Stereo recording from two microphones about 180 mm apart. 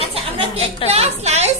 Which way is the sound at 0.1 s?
35° right (ahead or behind).